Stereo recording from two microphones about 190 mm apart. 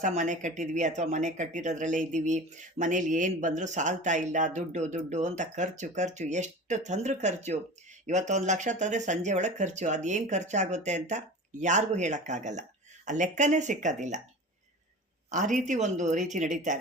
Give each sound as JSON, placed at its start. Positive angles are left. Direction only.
{"t": 0.0, "sound": "speech", "side_deg": -40}
{"t": 15.3, "sound": "speech", "side_deg": -40}